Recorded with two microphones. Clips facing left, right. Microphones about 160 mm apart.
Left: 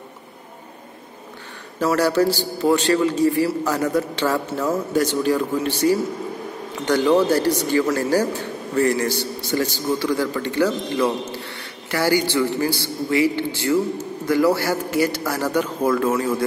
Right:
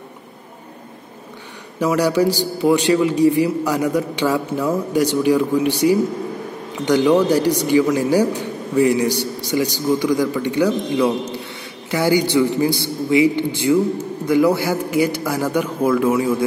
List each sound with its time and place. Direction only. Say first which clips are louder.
1.8 s a man's voice: right 1 dB; 15° right (ahead or behind)